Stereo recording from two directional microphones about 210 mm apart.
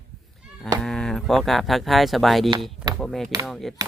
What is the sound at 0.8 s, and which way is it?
Speech, centre (ahead or behind).